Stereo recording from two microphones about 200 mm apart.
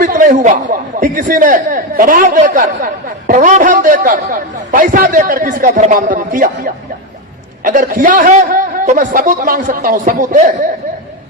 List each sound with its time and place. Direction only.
0.0 s a man's voice: 40° right (ahead or behind)
7.6 s speech: 40° right (ahead or behind)